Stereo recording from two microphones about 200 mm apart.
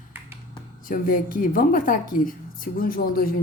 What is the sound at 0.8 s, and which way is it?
A woman's voice, 45° left (ahead or behind).